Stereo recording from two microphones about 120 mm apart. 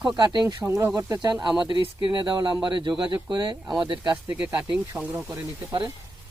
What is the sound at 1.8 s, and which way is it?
Speech, 40° right (ahead or behind).